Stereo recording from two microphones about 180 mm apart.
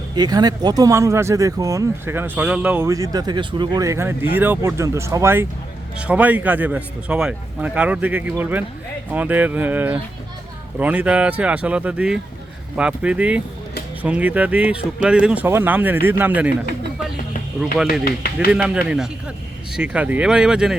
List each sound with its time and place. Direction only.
0.2 s speech: 20° right (ahead or behind)
18.5 s speech: 5° right (ahead or behind)